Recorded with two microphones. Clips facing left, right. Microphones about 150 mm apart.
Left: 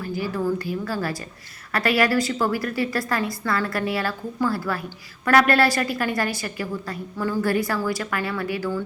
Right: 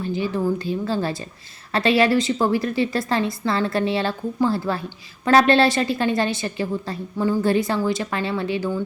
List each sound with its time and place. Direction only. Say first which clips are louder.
0.0 s a woman's voice: right 3 dB; 20° right (ahead or behind)